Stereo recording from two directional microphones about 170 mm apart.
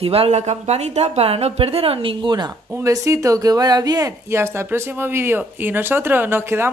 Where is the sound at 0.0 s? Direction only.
35° right (ahead or behind).